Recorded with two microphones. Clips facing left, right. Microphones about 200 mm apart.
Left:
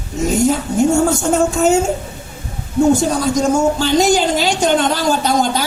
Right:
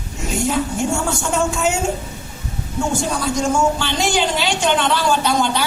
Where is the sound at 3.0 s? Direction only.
40° left (ahead or behind).